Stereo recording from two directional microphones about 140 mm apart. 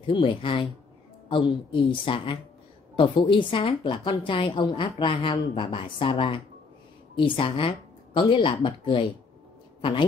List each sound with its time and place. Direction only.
0.0 s a man's voice: 35° left (ahead or behind)